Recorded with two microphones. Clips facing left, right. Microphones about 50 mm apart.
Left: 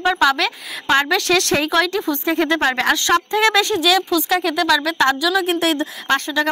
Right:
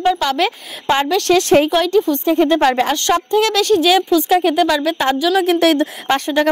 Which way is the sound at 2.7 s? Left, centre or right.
Left.